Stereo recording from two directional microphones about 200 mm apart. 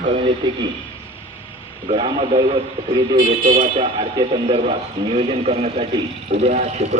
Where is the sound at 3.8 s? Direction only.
25° right (ahead or behind).